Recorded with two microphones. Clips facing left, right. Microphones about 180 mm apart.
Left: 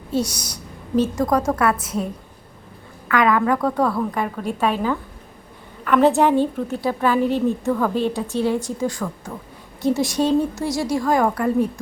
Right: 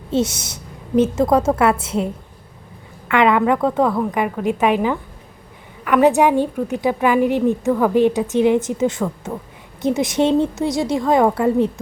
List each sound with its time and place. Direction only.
0.1 s a woman's voice: 25° right (ahead or behind)
3.1 s a woman's voice: 25° right (ahead or behind)